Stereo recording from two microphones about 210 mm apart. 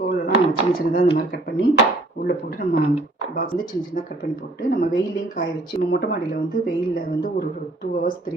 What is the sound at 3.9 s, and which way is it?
Speech, 40° left (ahead or behind).